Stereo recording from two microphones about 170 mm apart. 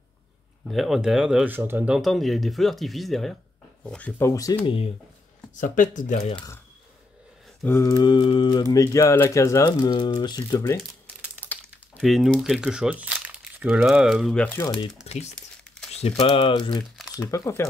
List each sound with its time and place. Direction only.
0.7 s speech: centre (ahead or behind); by 4.6 s 20° left (ahead or behind)
4.6 s speech: 35° left (ahead or behind)
5.5 s speech: 50° left (ahead or behind)
7.6 s speech: 15° left (ahead or behind)
12.0 s speech: centre (ahead or behind)
15.1 s crumpling: 35° left (ahead or behind)
15.9 s speech: 35° left (ahead or behind)
17.1 s speech: 15° left (ahead or behind)